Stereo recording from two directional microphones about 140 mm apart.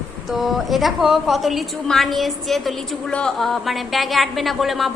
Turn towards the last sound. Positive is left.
turn(degrees=0)  # may be behind; listen again after turning